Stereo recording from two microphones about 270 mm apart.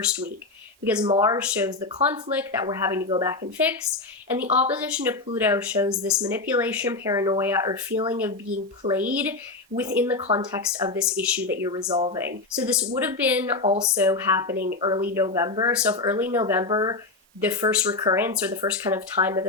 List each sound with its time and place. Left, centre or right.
1.0 s speech: centre
4.5 s speech: centre
10.2 s speech: right
11.1 s speech: centre
12.1 s speech: centre
14.5 s a woman's voice: right
14.8 s speech: centre